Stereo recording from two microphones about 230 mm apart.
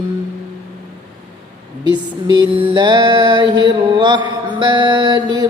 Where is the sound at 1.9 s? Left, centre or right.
Centre.